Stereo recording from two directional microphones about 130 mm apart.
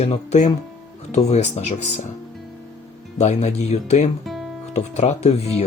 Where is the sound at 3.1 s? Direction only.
60° left (ahead or behind).